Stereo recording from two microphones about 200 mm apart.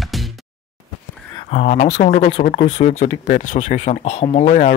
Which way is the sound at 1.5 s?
35° left (ahead or behind).